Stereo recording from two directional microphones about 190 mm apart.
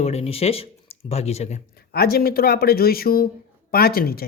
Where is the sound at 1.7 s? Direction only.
55° left (ahead or behind).